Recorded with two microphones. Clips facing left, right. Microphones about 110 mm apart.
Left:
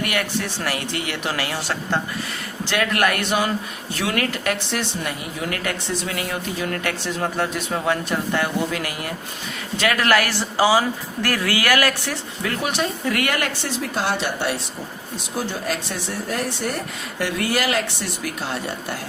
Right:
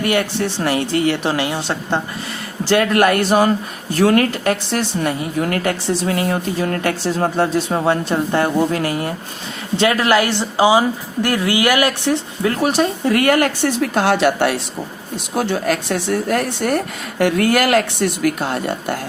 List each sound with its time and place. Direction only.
0.0 s speech: 30° right (ahead or behind)
13.7 s speech: 65° right (ahead or behind)